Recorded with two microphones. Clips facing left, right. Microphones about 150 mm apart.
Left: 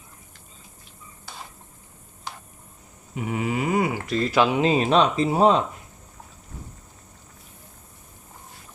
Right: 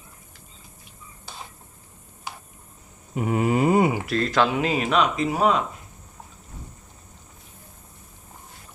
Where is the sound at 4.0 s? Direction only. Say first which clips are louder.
Left 1 dB; centre (ahead or behind); by 5.6 s 30° left (ahead or behind).